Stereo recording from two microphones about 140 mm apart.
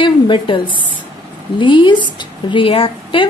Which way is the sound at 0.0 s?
35° left (ahead or behind).